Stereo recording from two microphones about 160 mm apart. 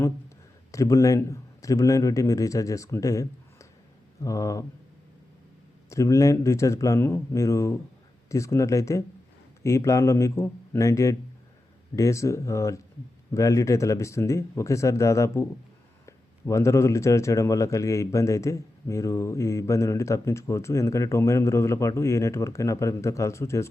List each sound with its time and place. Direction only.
0.7 s speech: 20° left (ahead or behind)
5.9 s speech: 20° left (ahead or behind)